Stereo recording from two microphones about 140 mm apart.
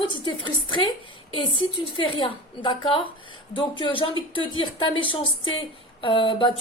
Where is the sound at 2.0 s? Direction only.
35° left (ahead or behind).